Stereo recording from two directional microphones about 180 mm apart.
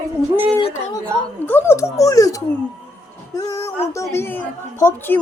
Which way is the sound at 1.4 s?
10° left (ahead or behind).